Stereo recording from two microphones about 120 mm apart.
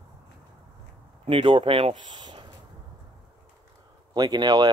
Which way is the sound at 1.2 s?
45° right (ahead or behind).